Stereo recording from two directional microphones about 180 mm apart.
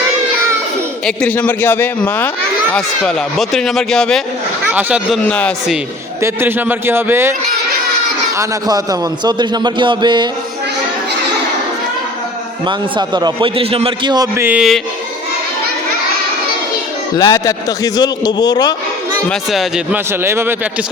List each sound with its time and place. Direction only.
1.0 s a man's voice: 5° left (ahead or behind)
4.7 s a man's voice: 10° right (ahead or behind)
5.2 s a man's voice: 5° left (ahead or behind)
6.2 s a man's voice: 10° right (ahead or behind)
8.4 s a man's voice: 20° right (ahead or behind)
12.6 s a man's voice: 25° right (ahead or behind); by 14.8 s 5° right (ahead or behind)
17.2 s a man's voice: 20° left (ahead or behind)
19.3 s speech: centre (ahead or behind)
20.1 s a man's voice: 15° right (ahead or behind)